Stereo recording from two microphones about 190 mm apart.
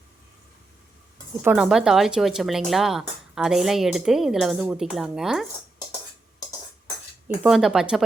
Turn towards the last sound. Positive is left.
turn(degrees=-5)  # may be behind; listen again after turning